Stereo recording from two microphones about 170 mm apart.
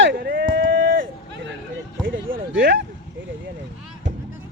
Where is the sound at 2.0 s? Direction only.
75° right (ahead or behind).